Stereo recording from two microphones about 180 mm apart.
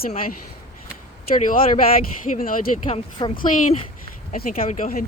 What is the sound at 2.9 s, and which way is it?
Speech, 25° left (ahead or behind).